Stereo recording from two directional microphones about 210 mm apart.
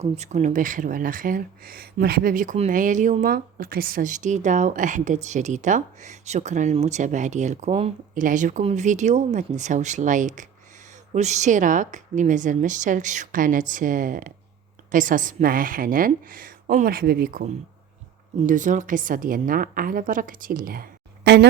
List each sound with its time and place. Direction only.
0.0 s speech: 30° right (ahead or behind); by 21.4 s 50° right (ahead or behind)